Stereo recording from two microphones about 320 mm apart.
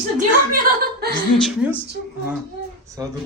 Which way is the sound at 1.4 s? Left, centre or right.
Centre.